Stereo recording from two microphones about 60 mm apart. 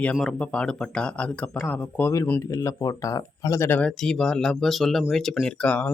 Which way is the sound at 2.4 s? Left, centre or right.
Left.